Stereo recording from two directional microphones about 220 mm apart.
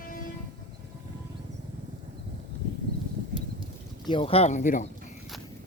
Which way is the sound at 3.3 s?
40° right (ahead or behind).